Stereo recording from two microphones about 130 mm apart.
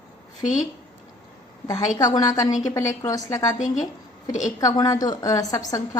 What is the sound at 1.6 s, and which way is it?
A woman's voice, 30° left (ahead or behind).